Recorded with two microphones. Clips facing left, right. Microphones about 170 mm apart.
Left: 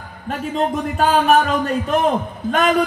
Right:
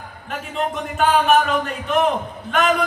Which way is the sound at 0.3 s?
35° left (ahead or behind).